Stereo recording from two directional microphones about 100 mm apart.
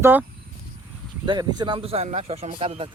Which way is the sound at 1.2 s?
50° right (ahead or behind).